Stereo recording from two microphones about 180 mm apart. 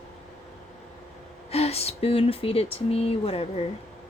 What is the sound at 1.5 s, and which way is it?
A woman's voice, 35° left (ahead or behind).